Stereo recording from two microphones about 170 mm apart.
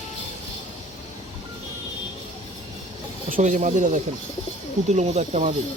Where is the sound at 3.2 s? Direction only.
50° right (ahead or behind).